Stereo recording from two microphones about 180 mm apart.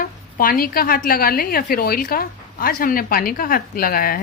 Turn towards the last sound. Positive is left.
turn(degrees=50)  # may be behind; listen again after turning